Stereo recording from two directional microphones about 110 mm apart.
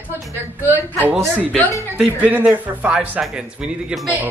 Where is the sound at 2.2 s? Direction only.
15° right (ahead or behind).